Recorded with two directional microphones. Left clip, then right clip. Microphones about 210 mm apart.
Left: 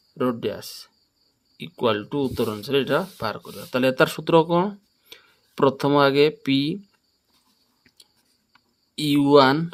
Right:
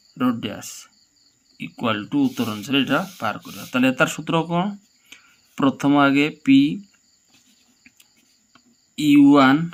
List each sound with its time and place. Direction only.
0.2 s speech: 50° left (ahead or behind)
9.0 s speech: 60° left (ahead or behind)